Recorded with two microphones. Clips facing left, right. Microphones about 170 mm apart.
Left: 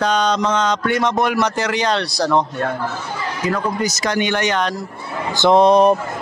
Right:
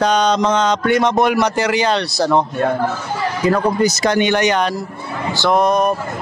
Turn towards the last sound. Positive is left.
turn(degrees=30)  # may be behind; listen again after turning